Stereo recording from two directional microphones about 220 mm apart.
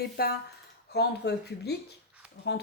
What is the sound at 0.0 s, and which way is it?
Speech, 45° left (ahead or behind).